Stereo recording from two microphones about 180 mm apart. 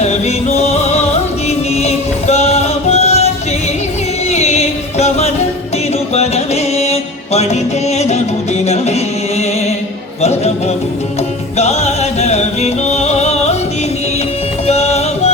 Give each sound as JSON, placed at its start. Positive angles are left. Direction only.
{"t": 0.0, "sound": "music", "side_deg": 35}
{"t": 4.3, "sound": "music", "side_deg": 35}
{"t": 10.2, "sound": "speech", "side_deg": 35}
{"t": 11.5, "sound": "music", "side_deg": 35}
{"t": 14.7, "sound": "music", "side_deg": 35}